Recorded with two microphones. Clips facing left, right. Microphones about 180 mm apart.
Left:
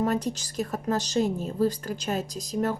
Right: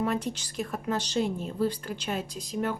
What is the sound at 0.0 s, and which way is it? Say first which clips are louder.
A woman's voice: left 3 dB; 40° left (ahead or behind).